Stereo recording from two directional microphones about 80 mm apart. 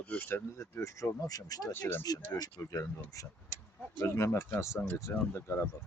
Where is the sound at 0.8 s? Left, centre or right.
Left.